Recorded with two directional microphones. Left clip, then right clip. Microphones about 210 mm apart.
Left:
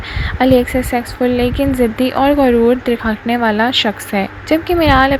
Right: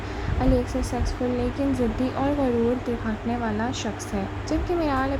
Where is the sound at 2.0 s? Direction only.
20° left (ahead or behind).